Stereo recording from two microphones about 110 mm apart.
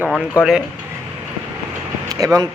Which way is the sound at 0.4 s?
10° right (ahead or behind).